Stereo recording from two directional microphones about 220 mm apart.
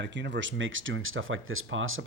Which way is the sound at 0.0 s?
55° right (ahead or behind).